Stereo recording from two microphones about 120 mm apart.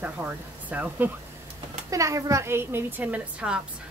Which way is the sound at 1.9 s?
25° right (ahead or behind).